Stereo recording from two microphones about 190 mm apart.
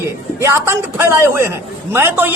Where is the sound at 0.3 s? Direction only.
15° right (ahead or behind).